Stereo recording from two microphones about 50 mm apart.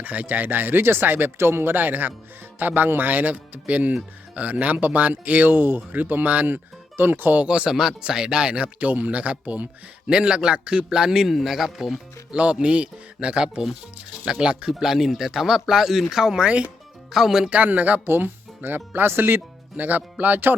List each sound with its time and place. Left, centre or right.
0.0 s speech: right
1.4 s speech: right
7.4 s speech: right
7.7 s a man's voice: centre
12.3 s speech: right
14.7 s a man's voice: centre
17.5 s speech: right
18.0 s speech: right
19.7 s speech: right